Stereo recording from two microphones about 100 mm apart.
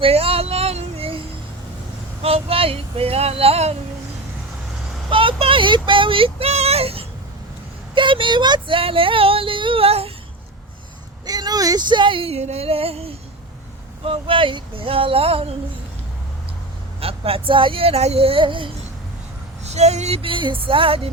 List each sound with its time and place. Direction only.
0.0 s speech: 75° right (ahead or behind)
2.2 s speech: 75° right (ahead or behind); by 3.8 s 90° right
5.0 s speech: 60° right (ahead or behind); by 7.0 s 80° right
7.9 s speech: 55° right (ahead or behind); by 10.1 s 75° right (ahead or behind)
11.3 s speech: 40° right (ahead or behind); by 13.1 s 80° right
14.0 s speech: 65° right (ahead or behind)
17.0 s speech: 75° right (ahead or behind)
19.6 s speech: 90° right; by 21.1 s 65° right (ahead or behind)